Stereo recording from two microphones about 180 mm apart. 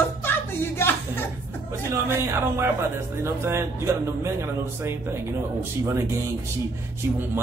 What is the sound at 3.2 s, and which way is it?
Speech, 15° right (ahead or behind).